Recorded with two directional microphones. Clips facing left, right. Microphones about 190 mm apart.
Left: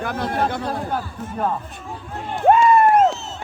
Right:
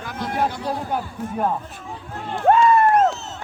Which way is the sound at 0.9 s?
10° right (ahead or behind).